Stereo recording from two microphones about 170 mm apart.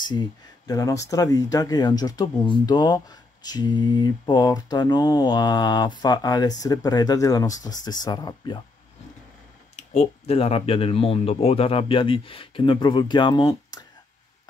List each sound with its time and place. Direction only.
0.0 s speech: 25° left (ahead or behind)
9.8 s speech: 40° left (ahead or behind)